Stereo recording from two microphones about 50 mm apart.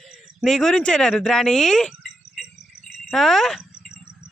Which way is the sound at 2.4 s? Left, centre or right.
Centre.